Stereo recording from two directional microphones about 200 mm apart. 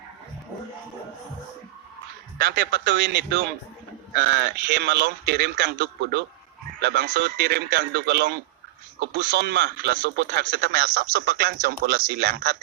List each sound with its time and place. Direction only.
2.4 s speech: 60° right (ahead or behind)
10.4 s speech: 45° right (ahead or behind)